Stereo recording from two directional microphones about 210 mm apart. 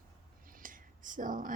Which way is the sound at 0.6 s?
40° right (ahead or behind).